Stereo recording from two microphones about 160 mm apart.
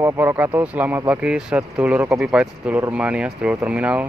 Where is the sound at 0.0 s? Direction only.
15° right (ahead or behind).